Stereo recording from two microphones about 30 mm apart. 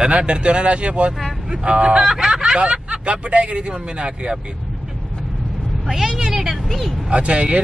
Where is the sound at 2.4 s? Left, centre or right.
Right.